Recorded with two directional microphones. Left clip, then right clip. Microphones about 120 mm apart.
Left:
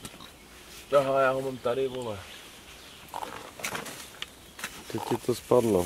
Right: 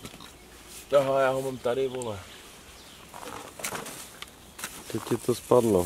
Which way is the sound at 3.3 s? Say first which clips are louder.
Even; 20° right (ahead or behind).